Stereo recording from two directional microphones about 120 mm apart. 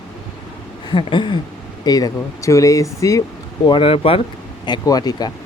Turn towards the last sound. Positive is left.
turn(degrees=35)  # may be behind; listen again after turning